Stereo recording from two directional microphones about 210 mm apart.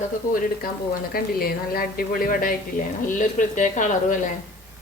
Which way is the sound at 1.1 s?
45° left (ahead or behind).